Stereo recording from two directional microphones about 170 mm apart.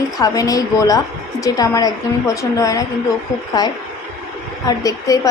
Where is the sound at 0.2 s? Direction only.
20° left (ahead or behind).